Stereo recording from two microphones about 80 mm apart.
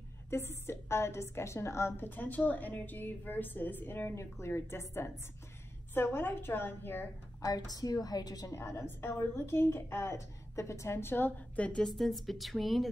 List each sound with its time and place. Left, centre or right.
0.3 s a woman's voice: left
7.4 s a woman's voice: left
8.5 s a woman's voice: left; by 11.8 s centre
11.8 s a woman's voice: centre